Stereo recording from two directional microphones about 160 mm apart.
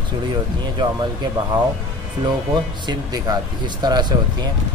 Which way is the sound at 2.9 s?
25° right (ahead or behind).